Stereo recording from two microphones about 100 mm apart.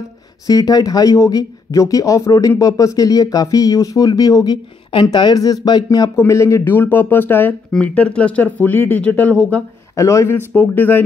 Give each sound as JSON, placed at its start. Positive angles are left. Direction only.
{"t": 0.5, "sound": "speech", "side_deg": 40}
{"t": 6.1, "sound": "speech", "side_deg": 30}
{"t": 9.9, "sound": "speech", "side_deg": 30}